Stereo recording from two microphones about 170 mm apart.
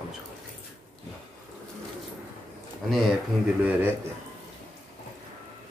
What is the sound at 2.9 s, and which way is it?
Speech, centre (ahead or behind).